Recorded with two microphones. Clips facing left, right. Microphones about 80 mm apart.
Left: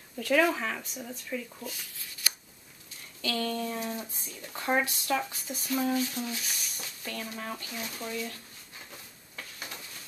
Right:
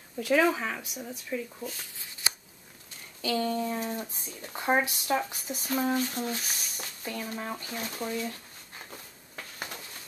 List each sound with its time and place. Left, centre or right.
0.2 s speech: centre
1.8 s shuffling cards: right
3.2 s speech: centre; by 6.4 s right
6.6 s a sound: right
7.3 s speech: centre